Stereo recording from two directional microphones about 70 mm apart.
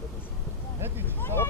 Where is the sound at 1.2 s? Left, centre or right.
Left.